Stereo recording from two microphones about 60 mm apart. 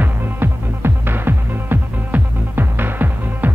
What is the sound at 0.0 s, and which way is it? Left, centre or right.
Music, right.